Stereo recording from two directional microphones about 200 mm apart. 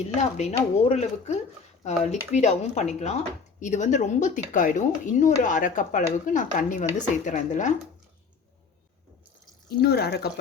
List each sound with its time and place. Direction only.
0.0 s speech: 35° left (ahead or behind)
9.6 s speech: 55° left (ahead or behind)